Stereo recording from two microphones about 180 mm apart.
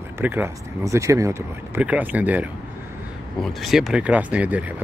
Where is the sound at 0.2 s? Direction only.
10° right (ahead or behind).